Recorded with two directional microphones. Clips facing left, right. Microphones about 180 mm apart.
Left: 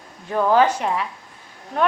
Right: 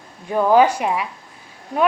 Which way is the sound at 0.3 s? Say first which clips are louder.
Right 3 dB; 10° right (ahead or behind).